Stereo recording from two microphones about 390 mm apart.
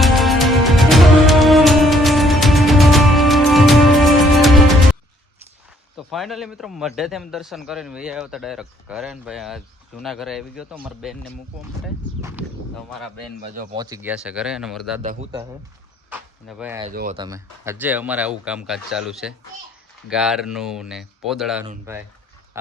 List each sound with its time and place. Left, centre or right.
0.0 s music: centre
6.0 s a man's voice: centre
12.9 s a man's voice: centre
15.0 s a man's voice: centre
16.9 s speech: right
17.2 s a man's voice: centre